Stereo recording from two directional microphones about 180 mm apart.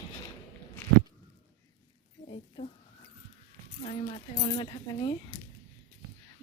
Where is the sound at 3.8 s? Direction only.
35° left (ahead or behind).